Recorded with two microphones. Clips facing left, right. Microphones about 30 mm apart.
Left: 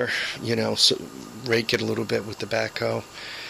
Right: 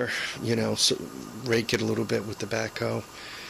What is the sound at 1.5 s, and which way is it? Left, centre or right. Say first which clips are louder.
Speech: left 2 dB; left.